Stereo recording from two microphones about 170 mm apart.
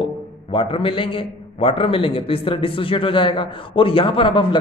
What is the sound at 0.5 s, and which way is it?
A man's voice, 30° left (ahead or behind).